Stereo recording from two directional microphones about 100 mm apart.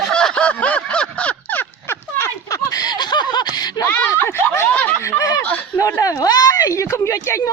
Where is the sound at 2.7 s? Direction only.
40° left (ahead or behind).